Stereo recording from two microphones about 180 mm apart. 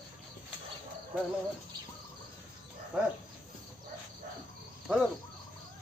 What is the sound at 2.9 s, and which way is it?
Speech, 5° right (ahead or behind).